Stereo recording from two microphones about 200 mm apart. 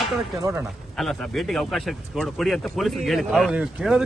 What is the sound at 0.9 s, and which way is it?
Speech, centre (ahead or behind).